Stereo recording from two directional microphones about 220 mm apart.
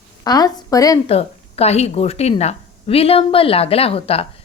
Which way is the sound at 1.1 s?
30° left (ahead or behind).